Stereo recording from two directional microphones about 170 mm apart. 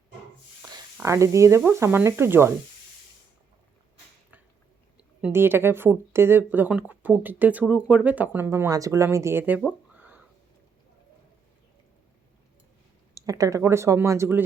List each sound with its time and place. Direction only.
0.9 s speech: 15° right (ahead or behind)
5.2 s speech: 15° right (ahead or behind)
9.9 s a sound: 10° right (ahead or behind)
13.2 s speech: 20° right (ahead or behind)